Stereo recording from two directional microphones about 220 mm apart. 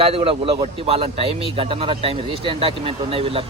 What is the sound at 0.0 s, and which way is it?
A man's voice, 25° right (ahead or behind).